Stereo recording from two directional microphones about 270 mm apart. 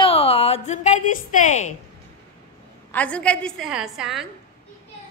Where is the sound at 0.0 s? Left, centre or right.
Left.